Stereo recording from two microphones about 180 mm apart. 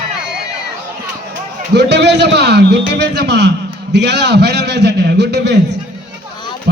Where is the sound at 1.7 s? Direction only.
70° right (ahead or behind).